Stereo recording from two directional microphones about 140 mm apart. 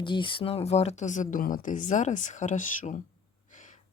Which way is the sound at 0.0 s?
35° left (ahead or behind).